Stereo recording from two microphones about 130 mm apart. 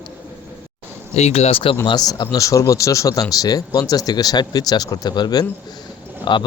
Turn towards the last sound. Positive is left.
turn(degrees=35)  # may be behind; listen again after turning